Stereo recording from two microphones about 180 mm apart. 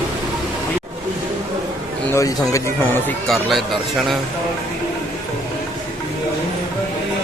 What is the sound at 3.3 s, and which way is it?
Speech, centre (ahead or behind).